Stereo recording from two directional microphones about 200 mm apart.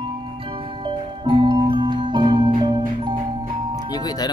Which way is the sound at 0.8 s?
25° right (ahead or behind).